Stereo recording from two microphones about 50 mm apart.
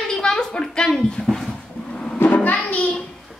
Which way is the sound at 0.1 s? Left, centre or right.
Centre.